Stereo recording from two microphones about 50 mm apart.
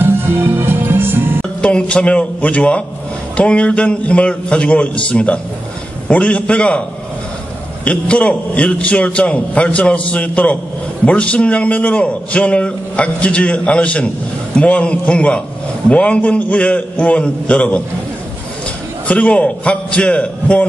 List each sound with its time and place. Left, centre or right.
0.0 s music: right
1.6 s a man's voice: left
7.8 s a man's voice: left
19.0 s a man's voice: left